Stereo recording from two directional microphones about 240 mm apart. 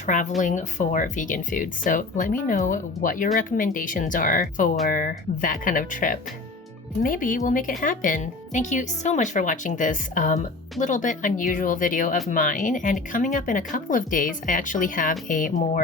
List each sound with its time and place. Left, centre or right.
0.0 s speech: left